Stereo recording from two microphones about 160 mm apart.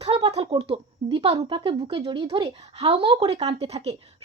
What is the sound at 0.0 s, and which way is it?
A woman's voice, 35° right (ahead or behind).